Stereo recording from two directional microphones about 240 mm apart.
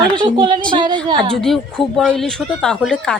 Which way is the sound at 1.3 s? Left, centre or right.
Centre.